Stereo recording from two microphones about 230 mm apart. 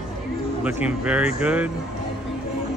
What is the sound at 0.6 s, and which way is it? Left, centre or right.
A man's voice, centre.